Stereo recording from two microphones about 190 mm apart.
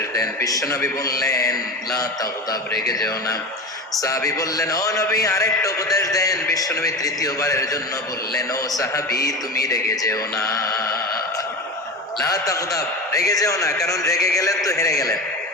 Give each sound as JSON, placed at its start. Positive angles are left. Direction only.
{"t": 0.1, "sound": "speech", "side_deg": 20}
{"t": 2.7, "sound": "a man's voice", "side_deg": 0}
{"t": 4.0, "sound": "speech", "side_deg": 15}
{"t": 8.8, "sound": "speech", "side_deg": 15}
{"t": 12.2, "sound": "speech", "side_deg": 15}